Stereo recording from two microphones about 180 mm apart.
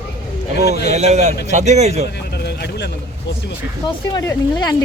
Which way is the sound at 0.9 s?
40° right (ahead or behind).